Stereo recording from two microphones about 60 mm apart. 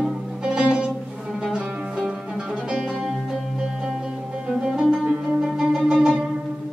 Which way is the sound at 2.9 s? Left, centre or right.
Centre.